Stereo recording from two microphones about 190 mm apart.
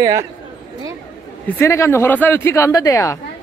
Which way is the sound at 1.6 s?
15° left (ahead or behind).